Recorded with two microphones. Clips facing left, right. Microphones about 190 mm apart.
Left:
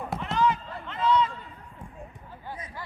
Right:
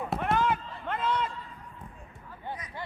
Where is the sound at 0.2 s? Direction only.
55° right (ahead or behind).